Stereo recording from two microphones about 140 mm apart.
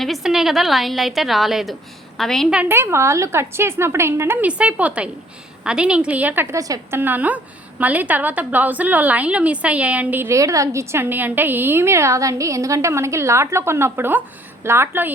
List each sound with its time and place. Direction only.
0.0 s a woman's voice: centre (ahead or behind)
2.6 s a woman's voice: 15° right (ahead or behind)
7.0 s a woman's voice: 10° right (ahead or behind)